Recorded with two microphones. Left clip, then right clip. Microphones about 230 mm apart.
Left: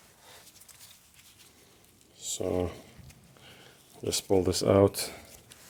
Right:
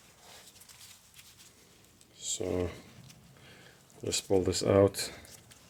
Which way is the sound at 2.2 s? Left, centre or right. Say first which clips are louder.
Left 3 dB; left.